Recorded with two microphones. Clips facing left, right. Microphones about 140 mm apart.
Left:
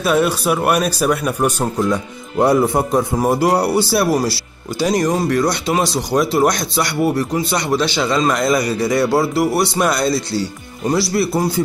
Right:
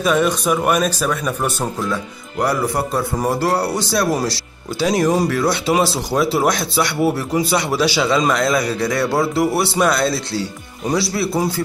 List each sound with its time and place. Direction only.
0.0 s speech: 10° left (ahead or behind)
1.9 s speech: 25° left (ahead or behind); by 11.4 s centre (ahead or behind)